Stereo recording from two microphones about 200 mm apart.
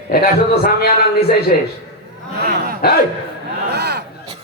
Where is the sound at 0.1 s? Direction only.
50° left (ahead or behind).